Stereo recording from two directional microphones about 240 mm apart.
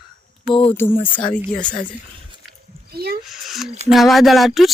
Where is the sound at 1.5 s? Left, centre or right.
Centre.